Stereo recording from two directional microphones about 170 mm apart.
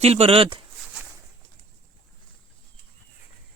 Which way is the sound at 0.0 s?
35° right (ahead or behind).